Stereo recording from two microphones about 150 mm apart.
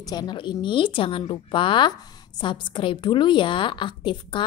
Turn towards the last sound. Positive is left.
turn(degrees=30)  # may be behind; listen again after turning